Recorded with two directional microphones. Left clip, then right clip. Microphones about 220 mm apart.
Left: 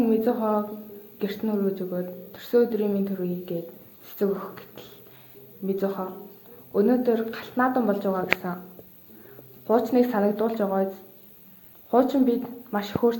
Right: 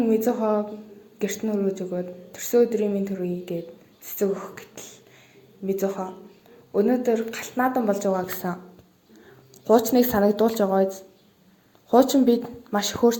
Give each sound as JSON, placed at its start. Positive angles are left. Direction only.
{"t": 0.0, "sound": "a woman's voice", "side_deg": -20}
{"t": 5.8, "sound": "speech", "side_deg": -15}
{"t": 8.4, "sound": "speech", "side_deg": -35}
{"t": 9.6, "sound": "speech", "side_deg": -35}
{"t": 11.9, "sound": "speech", "side_deg": -35}